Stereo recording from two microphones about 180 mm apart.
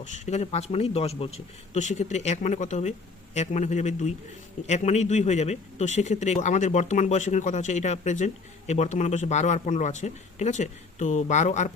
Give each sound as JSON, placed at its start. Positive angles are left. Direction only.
{"t": 0.0, "sound": "speech", "side_deg": 40}